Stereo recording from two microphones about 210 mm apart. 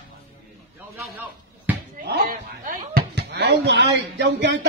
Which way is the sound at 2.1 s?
50° right (ahead or behind).